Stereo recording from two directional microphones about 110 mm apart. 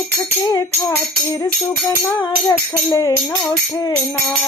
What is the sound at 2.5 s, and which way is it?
Speech, 35° left (ahead or behind).